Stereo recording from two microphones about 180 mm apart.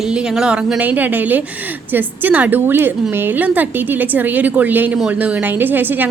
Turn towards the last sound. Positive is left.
turn(degrees=-10)  # may be behind; listen again after turning